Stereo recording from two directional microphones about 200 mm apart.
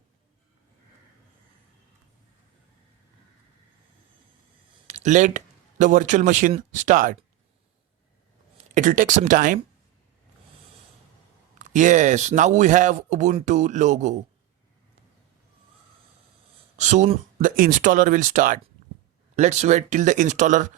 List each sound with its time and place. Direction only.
4.9 s speech: 35° right (ahead or behind)
8.7 s speech: 40° right (ahead or behind)
11.6 s speech: 40° right (ahead or behind)
16.7 s speech: 35° right (ahead or behind)